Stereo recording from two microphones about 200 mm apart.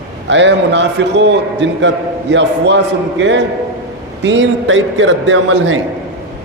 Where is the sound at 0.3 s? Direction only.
65° right (ahead or behind).